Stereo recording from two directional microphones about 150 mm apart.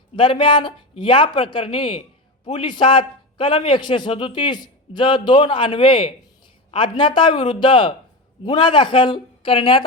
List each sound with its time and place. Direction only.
0.2 s speech: 35° left (ahead or behind)